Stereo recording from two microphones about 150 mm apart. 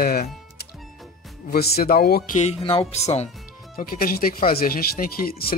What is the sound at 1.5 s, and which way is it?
Speech, 90° left.